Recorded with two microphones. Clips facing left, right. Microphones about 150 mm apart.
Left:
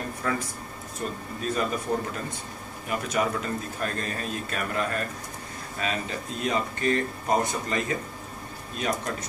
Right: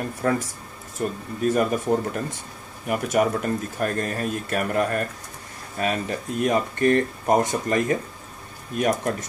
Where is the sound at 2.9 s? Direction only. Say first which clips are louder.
Right 5 dB; 50° right (ahead or behind).